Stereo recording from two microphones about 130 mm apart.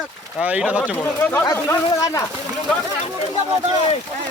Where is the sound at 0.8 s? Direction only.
15° left (ahead or behind).